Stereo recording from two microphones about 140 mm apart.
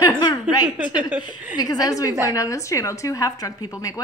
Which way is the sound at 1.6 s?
25° left (ahead or behind).